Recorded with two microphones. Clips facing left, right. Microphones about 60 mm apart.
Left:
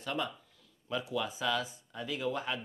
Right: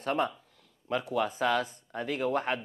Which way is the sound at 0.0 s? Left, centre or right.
Right.